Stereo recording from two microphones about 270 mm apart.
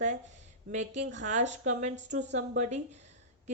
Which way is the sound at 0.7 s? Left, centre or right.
Right.